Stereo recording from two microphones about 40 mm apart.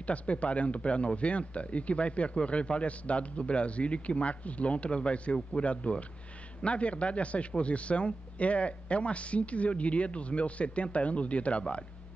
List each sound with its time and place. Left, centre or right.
0.0 s a man's voice: left
5.7 s speech: left